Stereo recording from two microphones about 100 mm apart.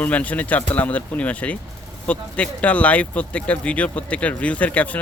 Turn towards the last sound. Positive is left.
turn(degrees=15)  # may be behind; listen again after turning